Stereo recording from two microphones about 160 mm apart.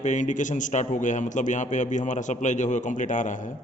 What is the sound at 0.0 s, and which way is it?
A man's voice, 50° left (ahead or behind).